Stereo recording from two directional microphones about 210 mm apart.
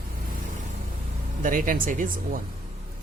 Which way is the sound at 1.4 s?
40° right (ahead or behind).